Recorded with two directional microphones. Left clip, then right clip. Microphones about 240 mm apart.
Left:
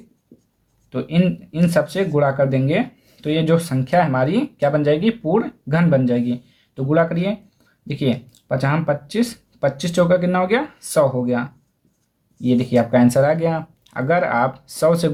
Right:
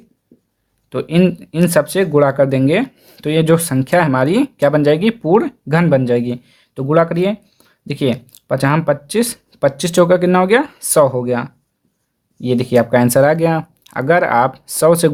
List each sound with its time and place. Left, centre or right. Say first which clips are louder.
0.9 s speech: right 6 dB; right